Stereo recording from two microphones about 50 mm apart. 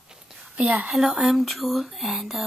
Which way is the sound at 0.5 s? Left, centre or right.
Right.